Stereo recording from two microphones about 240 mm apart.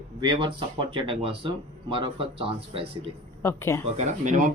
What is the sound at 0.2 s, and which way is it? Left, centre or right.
Speech, centre.